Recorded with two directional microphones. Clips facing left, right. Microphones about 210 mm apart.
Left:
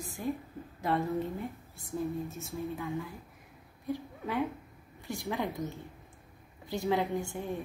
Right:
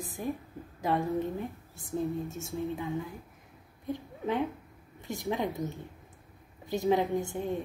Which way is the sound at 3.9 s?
20° right (ahead or behind).